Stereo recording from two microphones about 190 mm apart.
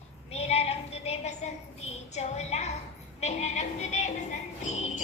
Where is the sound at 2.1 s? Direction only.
35° left (ahead or behind).